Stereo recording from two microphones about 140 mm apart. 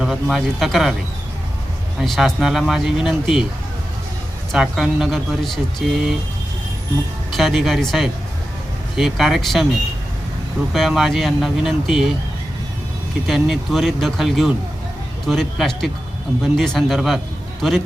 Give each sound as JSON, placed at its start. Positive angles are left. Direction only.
{"t": 0.0, "sound": "speech", "side_deg": 0}
{"t": 2.0, "sound": "speech", "side_deg": 0}
{"t": 4.5, "sound": "speech", "side_deg": 0}
{"t": 7.3, "sound": "speech", "side_deg": 0}
{"t": 10.8, "sound": "speech", "side_deg": 0}
{"t": 13.2, "sound": "speech", "side_deg": 0}